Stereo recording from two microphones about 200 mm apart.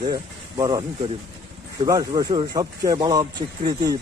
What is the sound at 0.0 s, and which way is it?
Speech, 20° right (ahead or behind).